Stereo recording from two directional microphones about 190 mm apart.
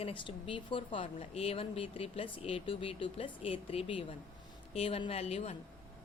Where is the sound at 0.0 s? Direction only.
25° left (ahead or behind).